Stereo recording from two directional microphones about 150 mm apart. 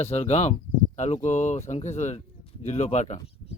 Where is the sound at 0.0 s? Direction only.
45° left (ahead or behind).